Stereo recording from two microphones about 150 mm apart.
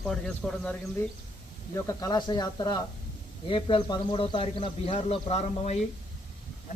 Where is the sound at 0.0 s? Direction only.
5° left (ahead or behind).